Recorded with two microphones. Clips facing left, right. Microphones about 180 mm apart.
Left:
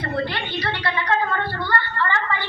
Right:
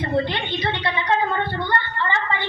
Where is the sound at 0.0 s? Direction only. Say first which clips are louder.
Right 3 dB; 20° right (ahead or behind).